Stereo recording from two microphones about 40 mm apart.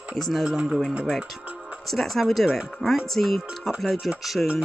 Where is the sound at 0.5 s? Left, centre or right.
Right.